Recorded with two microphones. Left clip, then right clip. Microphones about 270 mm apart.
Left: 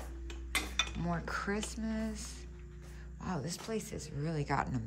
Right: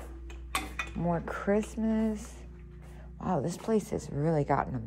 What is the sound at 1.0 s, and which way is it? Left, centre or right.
A woman's voice, centre.